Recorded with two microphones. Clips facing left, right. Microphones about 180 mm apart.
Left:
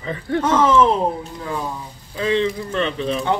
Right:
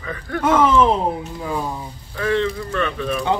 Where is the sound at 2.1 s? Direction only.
20° left (ahead or behind).